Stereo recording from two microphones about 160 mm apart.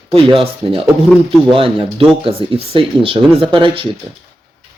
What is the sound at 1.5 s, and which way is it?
Speech, 35° right (ahead or behind).